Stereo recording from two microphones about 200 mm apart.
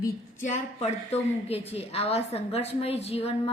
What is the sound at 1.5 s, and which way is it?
A woman's voice, 30° left (ahead or behind).